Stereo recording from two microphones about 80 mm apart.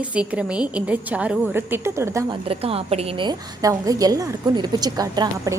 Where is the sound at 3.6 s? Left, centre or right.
Right.